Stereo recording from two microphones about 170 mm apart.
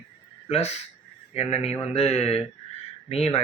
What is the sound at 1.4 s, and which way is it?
Speech, 35° left (ahead or behind).